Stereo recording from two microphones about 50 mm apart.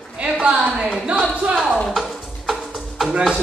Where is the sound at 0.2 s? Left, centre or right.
Right.